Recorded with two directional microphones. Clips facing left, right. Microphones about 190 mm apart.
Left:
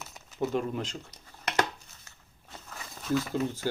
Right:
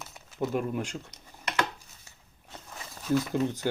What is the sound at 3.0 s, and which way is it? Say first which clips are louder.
Speech: right 2 dB; 15° right (ahead or behind).